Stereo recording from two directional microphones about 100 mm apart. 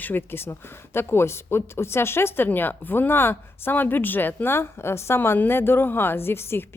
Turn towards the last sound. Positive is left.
turn(degrees=25)  # may be behind; listen again after turning